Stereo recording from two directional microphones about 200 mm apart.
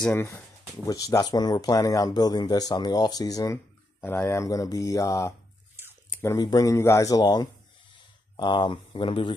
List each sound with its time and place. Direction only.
0.0 s speech: 10° left (ahead or behind)